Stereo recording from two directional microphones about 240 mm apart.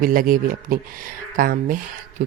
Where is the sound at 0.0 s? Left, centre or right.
Right.